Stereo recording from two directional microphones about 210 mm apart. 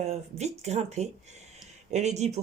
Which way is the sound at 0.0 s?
30° right (ahead or behind).